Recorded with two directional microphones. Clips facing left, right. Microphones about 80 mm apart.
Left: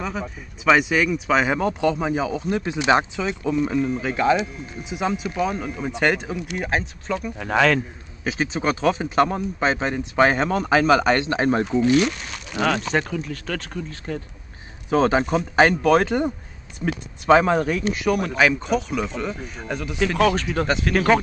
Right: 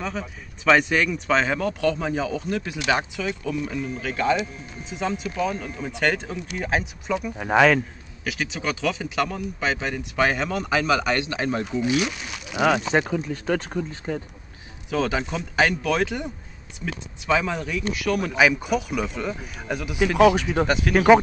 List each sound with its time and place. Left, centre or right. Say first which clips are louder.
0.0 s speech: left 2 dB; centre
1.6 s speech: left 2 dB; left
6.5 s speech: even; centre
6.8 s speech: even; centre
8.2 s speech: left 5 dB; left
11.8 s speech: left 5 dB; centre
14.9 s speech: left 6 dB; left
18.3 s speech: left 1 dB; centre